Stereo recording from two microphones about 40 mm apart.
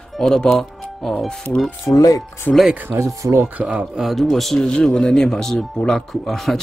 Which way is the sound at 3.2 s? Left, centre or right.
Right.